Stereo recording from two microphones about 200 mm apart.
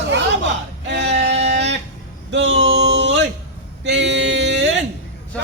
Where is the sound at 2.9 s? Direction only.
65° right (ahead or behind).